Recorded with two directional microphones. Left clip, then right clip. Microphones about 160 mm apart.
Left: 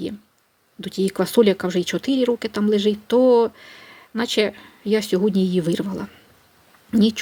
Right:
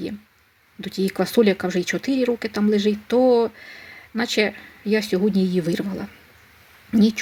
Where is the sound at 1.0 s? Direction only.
5° left (ahead or behind).